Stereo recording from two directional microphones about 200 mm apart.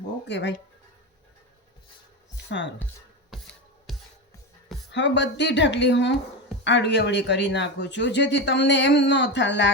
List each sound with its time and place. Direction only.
0.3 s speech: 60° left (ahead or behind)
2.5 s speech: 70° left (ahead or behind)
3.3 s music: centre (ahead or behind)
4.9 s speech: 65° left (ahead or behind)